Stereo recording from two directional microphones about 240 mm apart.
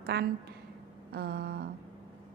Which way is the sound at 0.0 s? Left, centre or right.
Right.